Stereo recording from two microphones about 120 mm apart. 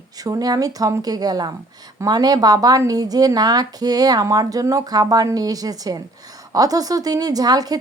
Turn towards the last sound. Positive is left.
turn(degrees=-35)  # may be behind; listen again after turning